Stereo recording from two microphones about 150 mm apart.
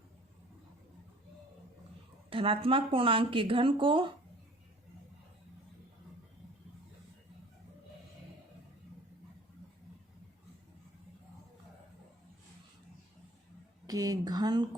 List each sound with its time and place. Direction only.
2.3 s speech: 35° right (ahead or behind)
13.8 s speech: 25° right (ahead or behind)